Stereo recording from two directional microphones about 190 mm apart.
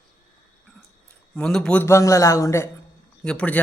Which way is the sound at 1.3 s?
5° left (ahead or behind).